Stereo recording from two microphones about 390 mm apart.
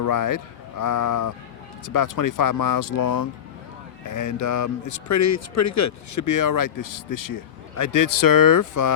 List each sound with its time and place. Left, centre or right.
0.0 s speech: left